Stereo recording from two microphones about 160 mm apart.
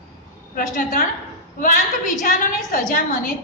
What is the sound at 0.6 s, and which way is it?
Speech, 60° left (ahead or behind).